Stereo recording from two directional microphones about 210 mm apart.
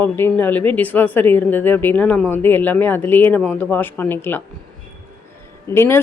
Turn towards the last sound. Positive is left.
turn(degrees=10)  # may be behind; listen again after turning